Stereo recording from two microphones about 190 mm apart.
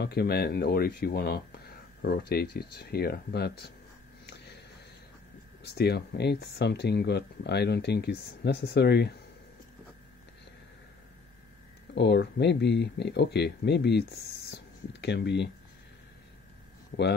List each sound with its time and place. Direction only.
0.0 s speech: 55° left (ahead or behind)
5.6 s speech: 60° left (ahead or behind)
11.9 s speech: 65° left (ahead or behind)